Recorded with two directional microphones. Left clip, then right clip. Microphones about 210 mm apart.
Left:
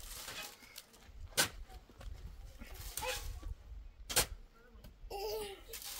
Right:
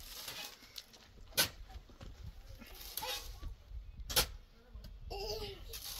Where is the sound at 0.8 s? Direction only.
35° left (ahead or behind).